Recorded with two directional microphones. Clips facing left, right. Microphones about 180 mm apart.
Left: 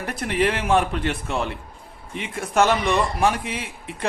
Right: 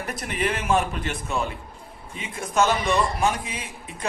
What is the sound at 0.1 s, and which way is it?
A man's voice, 60° left (ahead or behind).